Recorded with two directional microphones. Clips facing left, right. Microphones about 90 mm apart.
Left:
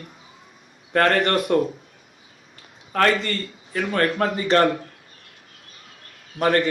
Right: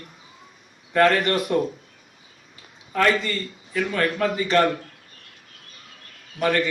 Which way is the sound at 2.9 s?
50° left (ahead or behind).